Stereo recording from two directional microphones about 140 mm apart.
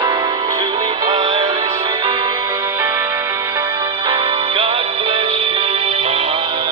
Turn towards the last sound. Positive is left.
turn(degrees=-40)  # may be behind; listen again after turning